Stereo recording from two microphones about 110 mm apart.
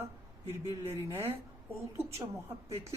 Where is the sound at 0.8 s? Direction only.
25° right (ahead or behind).